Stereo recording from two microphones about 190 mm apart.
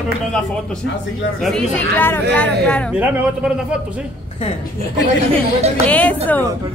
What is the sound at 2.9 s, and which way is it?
Speech, 5° right (ahead or behind).